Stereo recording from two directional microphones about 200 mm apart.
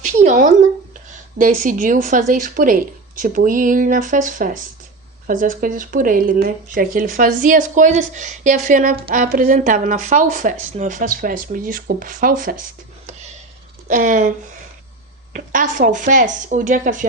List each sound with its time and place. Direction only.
0.0 s a sound: 40° right (ahead or behind)
1.1 s speech: 45° right (ahead or behind)
13.8 s speech: 40° right (ahead or behind)